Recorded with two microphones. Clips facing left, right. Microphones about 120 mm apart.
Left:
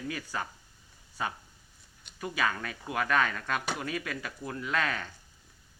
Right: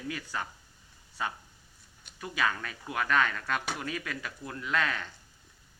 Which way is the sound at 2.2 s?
15° left (ahead or behind).